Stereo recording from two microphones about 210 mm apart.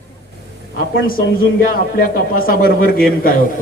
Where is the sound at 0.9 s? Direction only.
45° left (ahead or behind).